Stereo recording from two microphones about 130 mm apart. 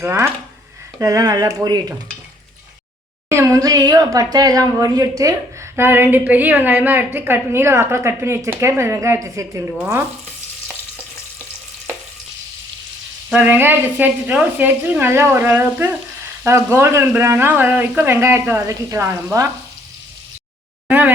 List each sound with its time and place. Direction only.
0.0 s a woman's voice: 20° right (ahead or behind)
3.2 s a woman's voice: 20° right (ahead or behind)
13.3 s a woman's voice: 15° right (ahead or behind)
20.8 s a sound: 10° right (ahead or behind)